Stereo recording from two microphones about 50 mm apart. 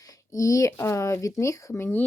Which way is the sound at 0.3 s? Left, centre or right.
Left.